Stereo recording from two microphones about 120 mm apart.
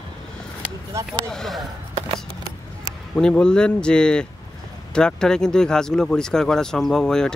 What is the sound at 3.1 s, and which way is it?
Speech, 10° left (ahead or behind).